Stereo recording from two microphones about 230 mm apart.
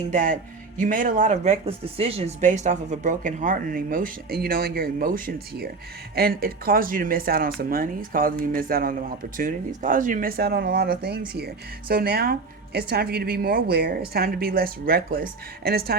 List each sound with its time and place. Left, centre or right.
0.1 s speech: right